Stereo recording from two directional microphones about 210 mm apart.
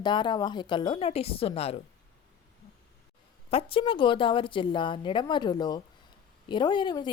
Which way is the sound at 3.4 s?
25° left (ahead or behind).